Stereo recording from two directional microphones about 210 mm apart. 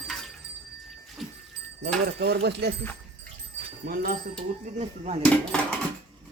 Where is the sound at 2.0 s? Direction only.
50° right (ahead or behind).